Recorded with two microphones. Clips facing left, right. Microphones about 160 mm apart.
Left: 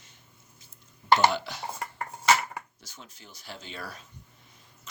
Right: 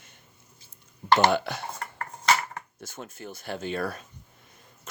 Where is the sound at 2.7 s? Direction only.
55° right (ahead or behind).